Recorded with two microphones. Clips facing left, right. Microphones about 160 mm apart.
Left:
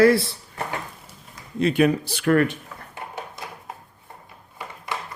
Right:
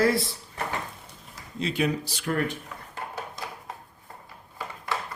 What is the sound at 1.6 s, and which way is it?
Speech, 55° left (ahead or behind).